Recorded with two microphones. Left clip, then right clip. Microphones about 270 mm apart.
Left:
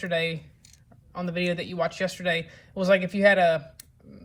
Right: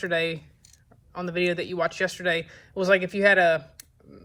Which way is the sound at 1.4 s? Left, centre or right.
Right.